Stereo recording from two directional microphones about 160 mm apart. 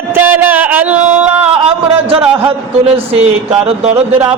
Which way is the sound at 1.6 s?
35° right (ahead or behind).